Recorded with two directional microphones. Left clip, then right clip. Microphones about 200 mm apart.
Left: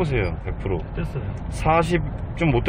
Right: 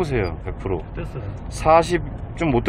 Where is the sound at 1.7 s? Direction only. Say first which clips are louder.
Right 5 dB; 15° right (ahead or behind).